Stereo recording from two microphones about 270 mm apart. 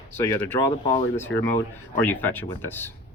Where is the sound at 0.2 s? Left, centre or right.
Centre.